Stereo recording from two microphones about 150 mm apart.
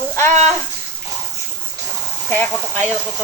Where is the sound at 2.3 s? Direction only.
10° left (ahead or behind).